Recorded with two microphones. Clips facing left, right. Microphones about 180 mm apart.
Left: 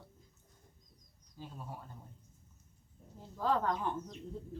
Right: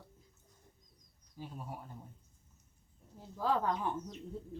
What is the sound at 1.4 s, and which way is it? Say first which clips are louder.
Speech: right 2 dB; 10° right (ahead or behind).